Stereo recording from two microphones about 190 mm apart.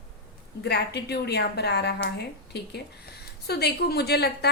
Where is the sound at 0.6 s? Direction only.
60° left (ahead or behind).